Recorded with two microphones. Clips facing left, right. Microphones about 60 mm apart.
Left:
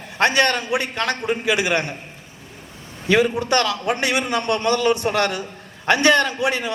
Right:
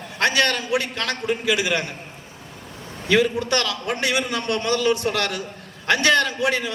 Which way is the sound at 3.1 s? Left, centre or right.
Left.